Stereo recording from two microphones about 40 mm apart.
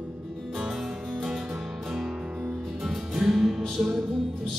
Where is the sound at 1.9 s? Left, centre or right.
Centre.